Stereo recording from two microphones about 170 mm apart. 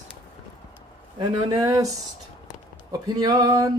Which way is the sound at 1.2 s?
25° right (ahead or behind).